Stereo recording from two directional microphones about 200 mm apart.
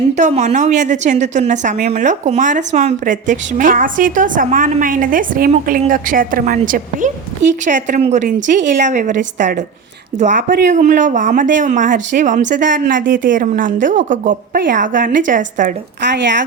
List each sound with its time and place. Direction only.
0.2 s a woman's voice: 35° right (ahead or behind)